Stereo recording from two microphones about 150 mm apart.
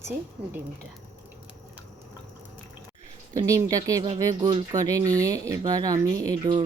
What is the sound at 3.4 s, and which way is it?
Speech, 20° right (ahead or behind).